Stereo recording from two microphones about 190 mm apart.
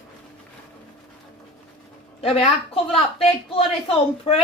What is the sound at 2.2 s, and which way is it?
Speech, 30° left (ahead or behind).